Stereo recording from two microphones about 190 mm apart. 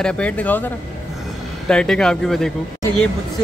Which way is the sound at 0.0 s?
5° left (ahead or behind).